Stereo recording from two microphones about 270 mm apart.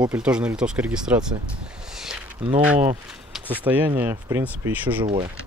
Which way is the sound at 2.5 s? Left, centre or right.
Centre.